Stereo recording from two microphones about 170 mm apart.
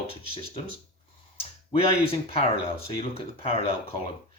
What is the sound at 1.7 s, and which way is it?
Speech, 35° left (ahead or behind).